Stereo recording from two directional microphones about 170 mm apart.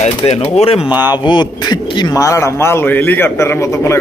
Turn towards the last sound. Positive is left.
turn(degrees=15)  # may be behind; listen again after turning